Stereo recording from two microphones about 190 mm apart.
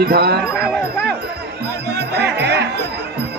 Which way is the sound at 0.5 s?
5° right (ahead or behind).